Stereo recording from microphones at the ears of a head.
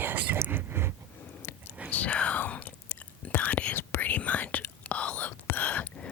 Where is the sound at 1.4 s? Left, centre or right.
Left.